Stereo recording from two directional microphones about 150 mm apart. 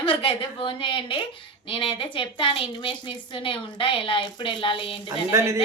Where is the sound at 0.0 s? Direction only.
40° left (ahead or behind).